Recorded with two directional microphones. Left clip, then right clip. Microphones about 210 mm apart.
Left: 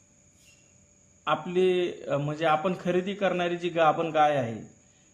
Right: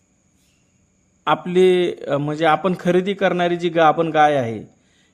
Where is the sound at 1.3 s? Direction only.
35° right (ahead or behind).